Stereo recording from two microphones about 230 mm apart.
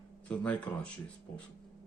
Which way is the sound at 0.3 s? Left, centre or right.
Centre.